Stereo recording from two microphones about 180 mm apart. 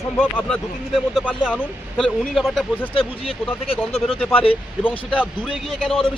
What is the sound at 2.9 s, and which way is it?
Speech, 30° left (ahead or behind).